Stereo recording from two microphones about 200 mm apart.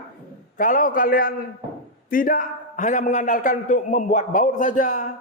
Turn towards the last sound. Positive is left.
turn(degrees=40)  # may be behind; listen again after turning